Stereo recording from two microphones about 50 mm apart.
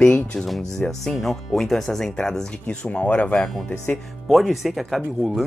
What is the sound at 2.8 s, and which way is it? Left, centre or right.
Speech, left.